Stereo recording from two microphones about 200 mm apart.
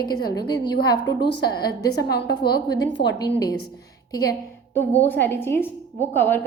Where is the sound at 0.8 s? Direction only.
50° left (ahead or behind).